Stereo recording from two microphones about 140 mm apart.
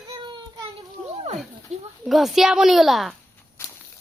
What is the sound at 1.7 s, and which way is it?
Speech, 55° right (ahead or behind).